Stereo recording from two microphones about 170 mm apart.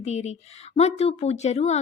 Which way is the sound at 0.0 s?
40° left (ahead or behind).